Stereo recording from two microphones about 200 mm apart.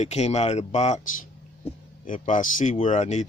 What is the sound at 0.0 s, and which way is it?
Speech, 35° left (ahead or behind).